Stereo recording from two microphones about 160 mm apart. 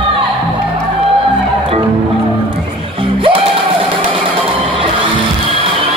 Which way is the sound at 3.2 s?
35° right (ahead or behind).